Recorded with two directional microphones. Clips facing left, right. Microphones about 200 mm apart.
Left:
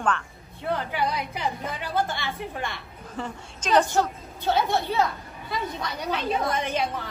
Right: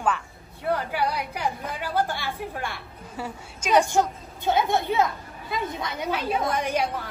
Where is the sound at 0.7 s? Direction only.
5° right (ahead or behind).